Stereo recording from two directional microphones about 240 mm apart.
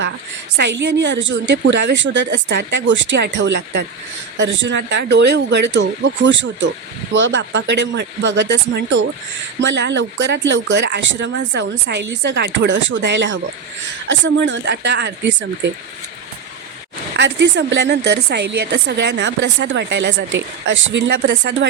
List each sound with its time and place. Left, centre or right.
0.5 s a woman's voice: right
17.2 s a woman's voice: right